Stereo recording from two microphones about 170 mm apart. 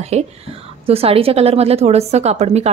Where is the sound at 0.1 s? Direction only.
40° right (ahead or behind).